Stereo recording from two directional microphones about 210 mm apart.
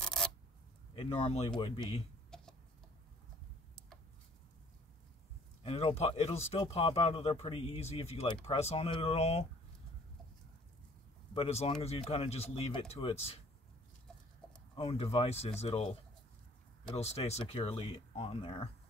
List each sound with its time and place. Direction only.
0.0 s a sound: centre (ahead or behind)
0.9 s speech: 30° left (ahead or behind)
2.3 s chicken: 5° left (ahead or behind)
5.6 s speech: 25° left (ahead or behind)
11.3 s speech: 30° left (ahead or behind)
14.8 s speech: 25° left (ahead or behind)
16.9 s speech: 30° left (ahead or behind)